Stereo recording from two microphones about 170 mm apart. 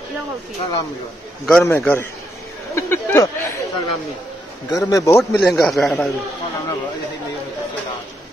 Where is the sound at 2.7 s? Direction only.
15° left (ahead or behind).